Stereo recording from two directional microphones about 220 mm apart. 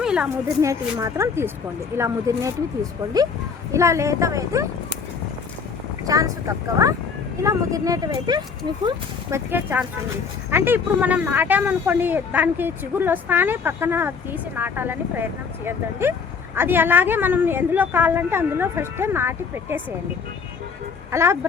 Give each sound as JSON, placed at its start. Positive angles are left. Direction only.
{"t": 0.0, "sound": "a sound", "side_deg": -5}
{"t": 0.6, "sound": "speech", "side_deg": -15}
{"t": 3.7, "sound": "speech", "side_deg": -15}
{"t": 6.1, "sound": "speech", "side_deg": -15}
{"t": 9.5, "sound": "speech", "side_deg": -10}
{"t": 21.1, "sound": "speech", "side_deg": -10}